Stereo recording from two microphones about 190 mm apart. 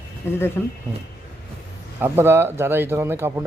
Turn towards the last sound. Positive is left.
turn(degrees=-10)  # may be behind; listen again after turning